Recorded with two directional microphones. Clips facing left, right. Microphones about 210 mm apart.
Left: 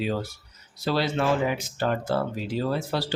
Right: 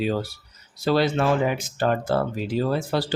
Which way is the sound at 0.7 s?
50° right (ahead or behind).